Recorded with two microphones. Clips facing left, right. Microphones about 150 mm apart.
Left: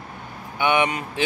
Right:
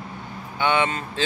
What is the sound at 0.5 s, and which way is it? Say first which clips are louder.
Speech: left 1 dB; 15° left (ahead or behind).